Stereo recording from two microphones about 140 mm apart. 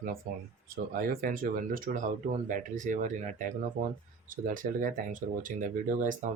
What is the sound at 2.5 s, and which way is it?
Speech, 65° right (ahead or behind).